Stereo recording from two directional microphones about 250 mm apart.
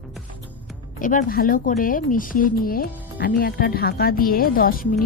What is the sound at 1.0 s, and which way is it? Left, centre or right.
Speech, left.